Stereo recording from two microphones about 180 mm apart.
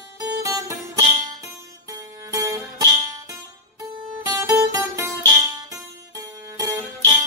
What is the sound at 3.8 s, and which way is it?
Music, 15° right (ahead or behind).